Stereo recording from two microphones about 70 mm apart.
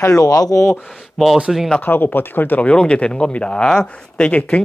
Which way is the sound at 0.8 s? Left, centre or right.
Centre.